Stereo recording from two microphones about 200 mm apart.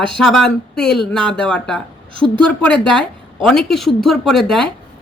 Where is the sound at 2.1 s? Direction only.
25° right (ahead or behind).